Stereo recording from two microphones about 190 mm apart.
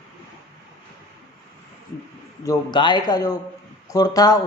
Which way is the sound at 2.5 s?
25° left (ahead or behind).